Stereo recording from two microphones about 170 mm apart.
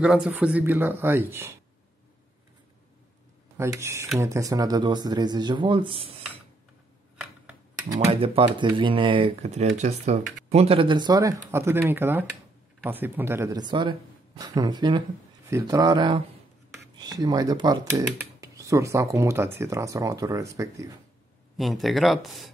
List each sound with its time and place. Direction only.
0.0 s speech: 5° right (ahead or behind)
3.5 s speech: 15° right (ahead or behind)
8.1 s speech: 30° right (ahead or behind)
21.5 s speech: centre (ahead or behind)